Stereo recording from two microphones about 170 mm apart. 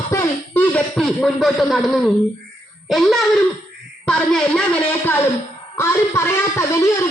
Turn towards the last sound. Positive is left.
turn(degrees=15)  # may be behind; listen again after turning